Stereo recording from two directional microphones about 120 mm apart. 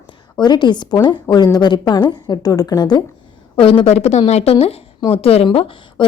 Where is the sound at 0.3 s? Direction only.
35° left (ahead or behind).